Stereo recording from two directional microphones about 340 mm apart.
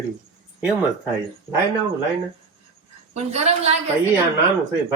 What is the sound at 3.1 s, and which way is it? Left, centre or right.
Speech, centre.